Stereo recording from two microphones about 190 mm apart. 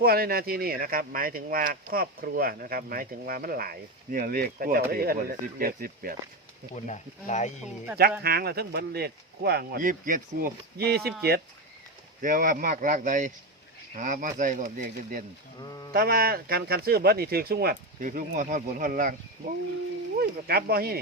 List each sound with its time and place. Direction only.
0.0 s speech: 55° right (ahead or behind)
6.7 s speech: 40° left (ahead or behind)
8.2 s speech: 55° right (ahead or behind)
12.2 s speech: 45° right (ahead or behind)
20.1 s speech: 55° right (ahead or behind)